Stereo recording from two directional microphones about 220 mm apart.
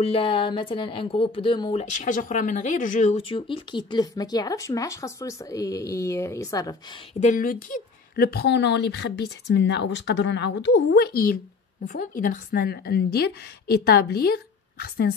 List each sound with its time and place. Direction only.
0.0 s speech: 25° left (ahead or behind)
7.2 s speech: 35° left (ahead or behind)